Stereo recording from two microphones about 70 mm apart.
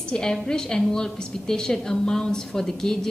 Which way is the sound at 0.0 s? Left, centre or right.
Centre.